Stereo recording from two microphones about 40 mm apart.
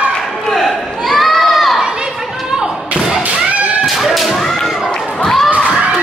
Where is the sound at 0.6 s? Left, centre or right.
Centre.